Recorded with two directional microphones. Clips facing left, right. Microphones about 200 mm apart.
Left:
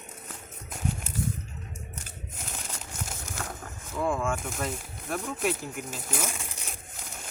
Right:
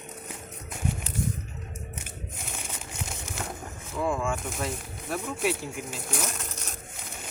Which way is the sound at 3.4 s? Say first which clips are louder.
Right 2 dB; 10° right (ahead or behind).